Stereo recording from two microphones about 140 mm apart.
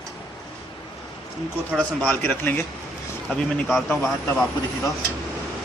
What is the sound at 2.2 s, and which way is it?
Speech, 15° left (ahead or behind).